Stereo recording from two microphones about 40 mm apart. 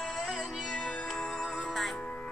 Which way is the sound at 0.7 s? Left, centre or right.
Left.